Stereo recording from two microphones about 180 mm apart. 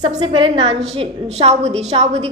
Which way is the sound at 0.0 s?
30° right (ahead or behind).